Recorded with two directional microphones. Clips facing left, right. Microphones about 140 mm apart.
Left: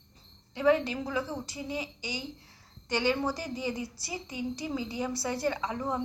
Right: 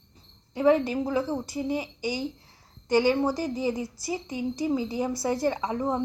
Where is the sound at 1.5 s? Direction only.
50° right (ahead or behind).